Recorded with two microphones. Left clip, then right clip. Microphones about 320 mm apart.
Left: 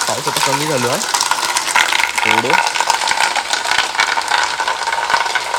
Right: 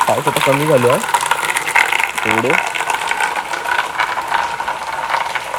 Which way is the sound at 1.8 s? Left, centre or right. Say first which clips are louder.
Left 1 dB; centre.